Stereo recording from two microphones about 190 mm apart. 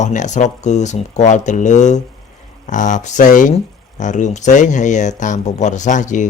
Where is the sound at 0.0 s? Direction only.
40° left (ahead or behind).